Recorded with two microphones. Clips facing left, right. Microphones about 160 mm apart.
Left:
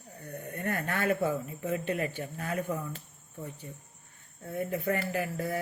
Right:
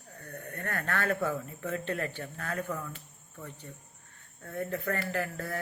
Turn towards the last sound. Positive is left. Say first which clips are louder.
# left 2 dB
turn(degrees=15)  # may be behind; listen again after turning